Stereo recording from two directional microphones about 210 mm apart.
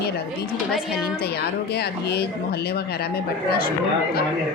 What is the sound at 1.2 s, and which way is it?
A woman's voice, 50° left (ahead or behind).